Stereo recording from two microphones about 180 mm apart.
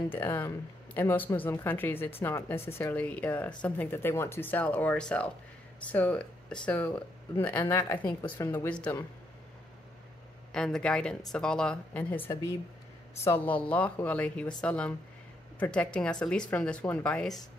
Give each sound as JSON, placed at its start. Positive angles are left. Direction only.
{"t": 0.1, "sound": "speech", "side_deg": 10}
{"t": 10.5, "sound": "a woman's voice", "side_deg": 5}